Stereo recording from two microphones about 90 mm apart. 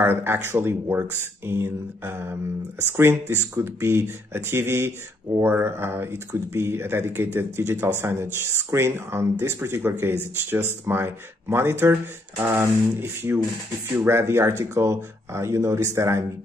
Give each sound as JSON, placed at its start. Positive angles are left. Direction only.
{"t": 0.0, "sound": "speech", "side_deg": -25}